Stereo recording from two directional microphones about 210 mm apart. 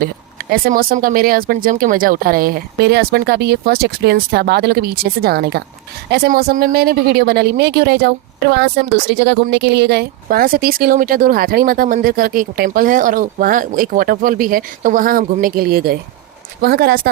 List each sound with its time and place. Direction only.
0.5 s speech: 45° right (ahead or behind)